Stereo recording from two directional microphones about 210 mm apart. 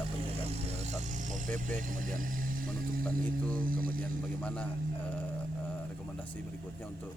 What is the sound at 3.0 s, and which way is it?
Speech, 5° left (ahead or behind).